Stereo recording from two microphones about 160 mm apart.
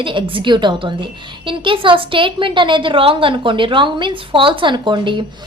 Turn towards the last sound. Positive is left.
turn(degrees=-30)  # may be behind; listen again after turning